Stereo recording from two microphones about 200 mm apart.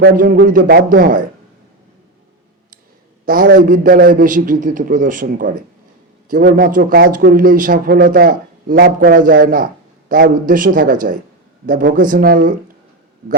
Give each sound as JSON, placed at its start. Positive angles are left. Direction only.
{"t": 0.0, "sound": "speech", "side_deg": -45}
{"t": 3.2, "sound": "a man's voice", "side_deg": -45}